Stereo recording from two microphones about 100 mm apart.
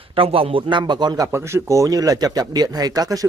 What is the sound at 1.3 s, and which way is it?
Speech, 30° right (ahead or behind).